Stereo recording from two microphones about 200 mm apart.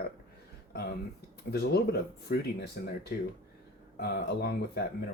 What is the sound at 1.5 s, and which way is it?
Speech, 50° left (ahead or behind).